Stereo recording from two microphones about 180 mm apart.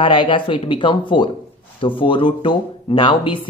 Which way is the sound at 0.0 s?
25° left (ahead or behind).